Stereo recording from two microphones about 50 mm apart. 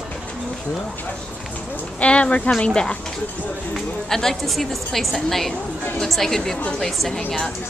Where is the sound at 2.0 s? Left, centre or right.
Left; by 7.2 s centre.